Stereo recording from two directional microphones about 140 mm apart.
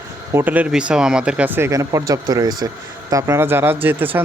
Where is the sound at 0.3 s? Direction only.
10° right (ahead or behind).